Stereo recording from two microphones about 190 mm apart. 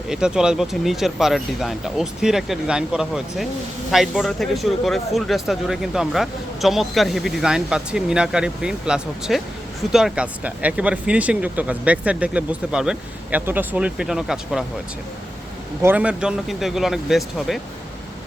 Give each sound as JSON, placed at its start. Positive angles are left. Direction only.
{"t": 0.1, "sound": "speech", "side_deg": -5}
{"t": 15.8, "sound": "speech", "side_deg": -10}